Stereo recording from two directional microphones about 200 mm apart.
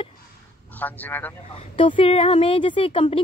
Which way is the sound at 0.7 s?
10° left (ahead or behind).